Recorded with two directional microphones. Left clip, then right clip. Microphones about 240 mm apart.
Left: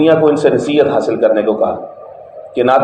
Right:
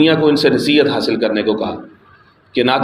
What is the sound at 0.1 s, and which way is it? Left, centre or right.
Speech, right.